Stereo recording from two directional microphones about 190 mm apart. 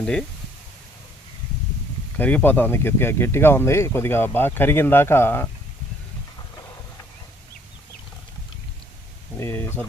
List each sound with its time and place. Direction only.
0.0 s speech: 5° left (ahead or behind)
2.1 s speech: 10° left (ahead or behind)
9.4 s speech: 10° left (ahead or behind)